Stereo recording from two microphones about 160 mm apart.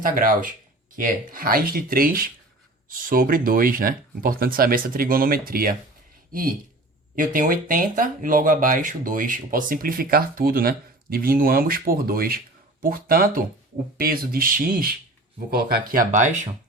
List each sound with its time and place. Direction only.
0.0 s speech: 60° right (ahead or behind)
7.3 s speech: 60° right (ahead or behind)